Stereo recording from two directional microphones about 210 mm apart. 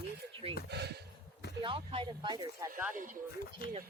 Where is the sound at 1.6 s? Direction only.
25° right (ahead or behind).